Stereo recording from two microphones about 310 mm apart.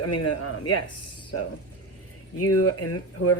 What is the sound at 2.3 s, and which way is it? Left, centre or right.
Speech, left.